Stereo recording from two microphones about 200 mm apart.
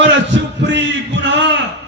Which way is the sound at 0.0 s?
65° right (ahead or behind).